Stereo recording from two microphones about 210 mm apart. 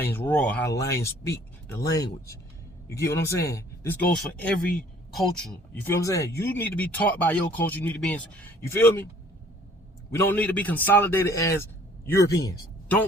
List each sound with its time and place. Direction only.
0.0 s speech: 10° left (ahead or behind)
10.1 s speech: 10° left (ahead or behind)